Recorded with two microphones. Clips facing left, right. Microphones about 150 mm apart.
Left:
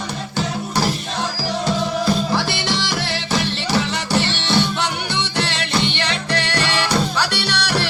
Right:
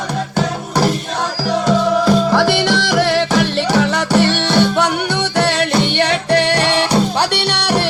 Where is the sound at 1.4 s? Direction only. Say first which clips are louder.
Right 8 dB; 70° right (ahead or behind); by 5.7 s 50° right (ahead or behind).